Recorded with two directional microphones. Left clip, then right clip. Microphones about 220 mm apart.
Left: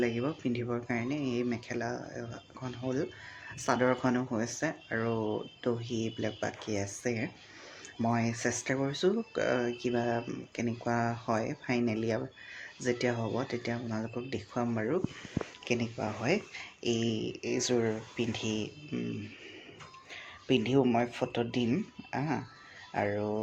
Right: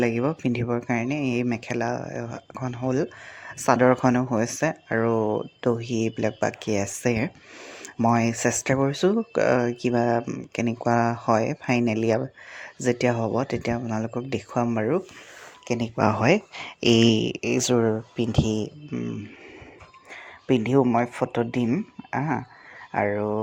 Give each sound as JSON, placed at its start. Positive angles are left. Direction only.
{"t": 0.0, "sound": "speech", "side_deg": -40}
{"t": 16.0, "sound": "speech", "side_deg": -45}
{"t": 20.5, "sound": "speech", "side_deg": -25}